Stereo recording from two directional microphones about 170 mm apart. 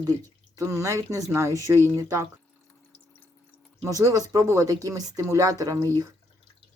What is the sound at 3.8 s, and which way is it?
Speech, 20° right (ahead or behind).